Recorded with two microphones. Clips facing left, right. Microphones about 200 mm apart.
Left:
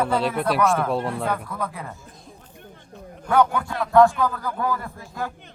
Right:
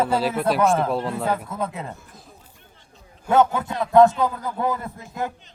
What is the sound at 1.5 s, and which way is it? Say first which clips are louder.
Speech: right 2 dB; 25° right (ahead or behind).